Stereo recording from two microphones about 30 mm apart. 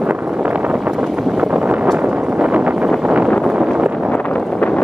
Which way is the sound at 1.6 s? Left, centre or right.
Right.